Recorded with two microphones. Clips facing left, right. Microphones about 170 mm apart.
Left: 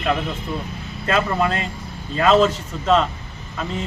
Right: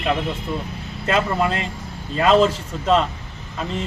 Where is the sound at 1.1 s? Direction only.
5° right (ahead or behind).